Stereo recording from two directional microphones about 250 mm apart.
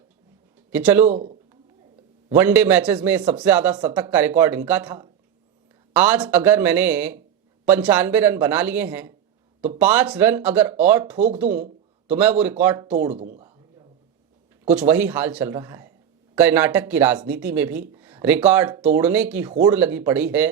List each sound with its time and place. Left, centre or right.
0.7 s speech: centre
1.0 s a man's voice: right
2.3 s speech: centre
13.1 s speech: right
14.7 s speech: centre